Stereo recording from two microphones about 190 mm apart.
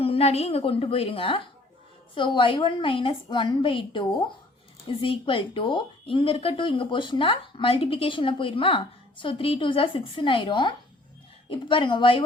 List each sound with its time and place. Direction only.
0.0 s speech: 30° left (ahead or behind)